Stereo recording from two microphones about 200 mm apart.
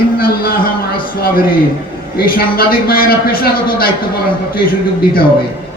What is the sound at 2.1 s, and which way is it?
A man's voice, 50° left (ahead or behind).